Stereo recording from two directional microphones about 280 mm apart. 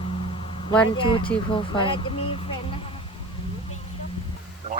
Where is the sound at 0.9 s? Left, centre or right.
Centre.